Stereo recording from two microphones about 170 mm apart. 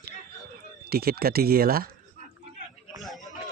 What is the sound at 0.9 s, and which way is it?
Speech, 65° right (ahead or behind).